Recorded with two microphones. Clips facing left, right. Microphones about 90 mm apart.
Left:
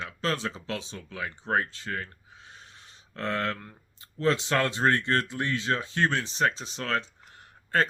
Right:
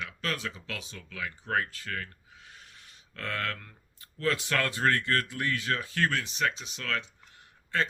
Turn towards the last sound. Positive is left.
turn(degrees=45)  # may be behind; listen again after turning